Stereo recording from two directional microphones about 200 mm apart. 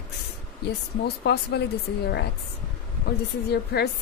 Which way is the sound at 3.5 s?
55° left (ahead or behind).